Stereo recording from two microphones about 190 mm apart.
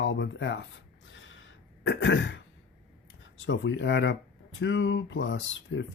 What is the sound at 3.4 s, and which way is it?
Speech, 75° left (ahead or behind).